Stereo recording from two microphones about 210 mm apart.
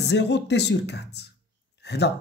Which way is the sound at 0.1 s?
55° left (ahead or behind).